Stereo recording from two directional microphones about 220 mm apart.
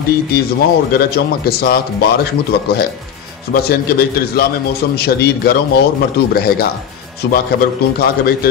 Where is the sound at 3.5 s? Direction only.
45° left (ahead or behind).